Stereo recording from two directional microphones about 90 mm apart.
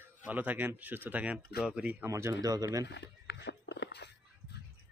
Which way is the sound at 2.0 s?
30° right (ahead or behind).